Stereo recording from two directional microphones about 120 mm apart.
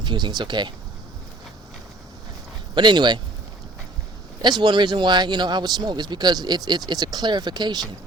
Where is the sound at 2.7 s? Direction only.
40° right (ahead or behind).